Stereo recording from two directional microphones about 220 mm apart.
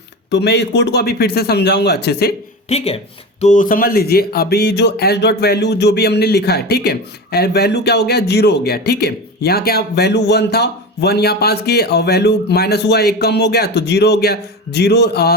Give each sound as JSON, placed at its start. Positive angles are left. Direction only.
{"t": 0.3, "sound": "speech", "side_deg": 50}
{"t": 2.6, "sound": "speech", "side_deg": 25}